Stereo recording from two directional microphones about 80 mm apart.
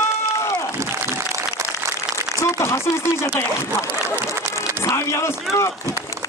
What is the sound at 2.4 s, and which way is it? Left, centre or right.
Chopping, left.